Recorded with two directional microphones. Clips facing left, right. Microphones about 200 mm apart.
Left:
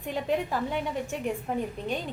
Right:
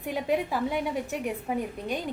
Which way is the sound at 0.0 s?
10° right (ahead or behind).